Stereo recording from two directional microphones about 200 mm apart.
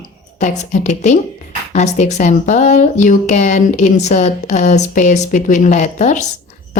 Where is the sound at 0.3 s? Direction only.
35° left (ahead or behind).